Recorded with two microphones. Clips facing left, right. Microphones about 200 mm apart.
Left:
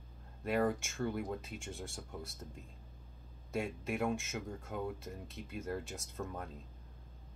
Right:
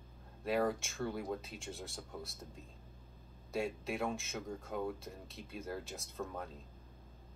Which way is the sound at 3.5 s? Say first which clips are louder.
Left 1 dB; centre (ahead or behind).